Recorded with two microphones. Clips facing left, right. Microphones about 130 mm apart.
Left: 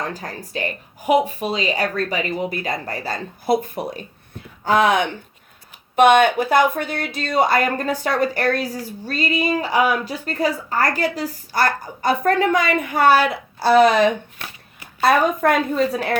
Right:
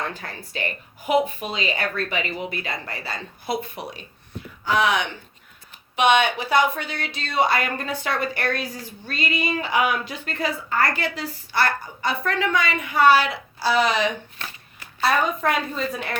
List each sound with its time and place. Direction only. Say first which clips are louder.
0.0 s speech: left 3 dB; 40° left (ahead or behind)
15.4 s speech: left 6 dB; 50° left (ahead or behind)